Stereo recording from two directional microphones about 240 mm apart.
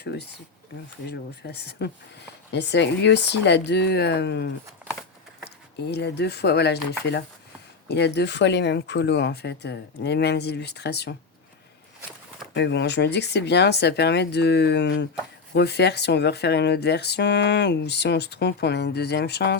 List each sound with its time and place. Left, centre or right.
0.0 s speech: left
12.5 s speech: left